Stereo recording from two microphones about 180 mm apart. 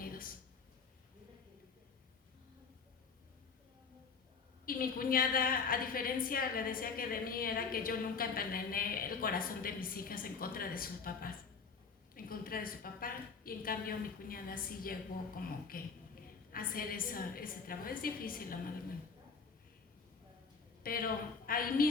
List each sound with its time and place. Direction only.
0.0 s a sound: 50° left (ahead or behind)
4.6 s a woman's voice: 55° left (ahead or behind)
20.8 s a woman's voice: 55° left (ahead or behind)